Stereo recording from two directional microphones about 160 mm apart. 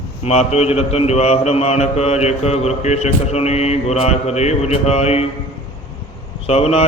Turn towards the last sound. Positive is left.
turn(degrees=40)  # may be behind; listen again after turning